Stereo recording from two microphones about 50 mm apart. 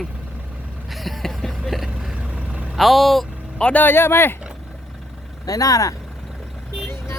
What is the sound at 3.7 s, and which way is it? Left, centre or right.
Speech, left.